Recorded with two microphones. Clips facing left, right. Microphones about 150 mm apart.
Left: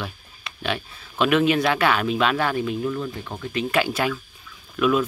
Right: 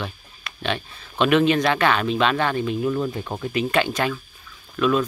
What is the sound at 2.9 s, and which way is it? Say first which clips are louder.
Speech: right 4 dB; 25° right (ahead or behind).